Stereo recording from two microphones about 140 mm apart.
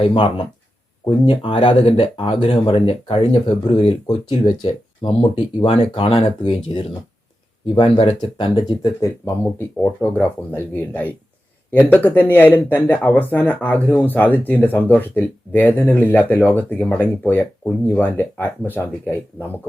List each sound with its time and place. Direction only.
0.0 s speech: 35° left (ahead or behind); by 19.5 s 15° left (ahead or behind)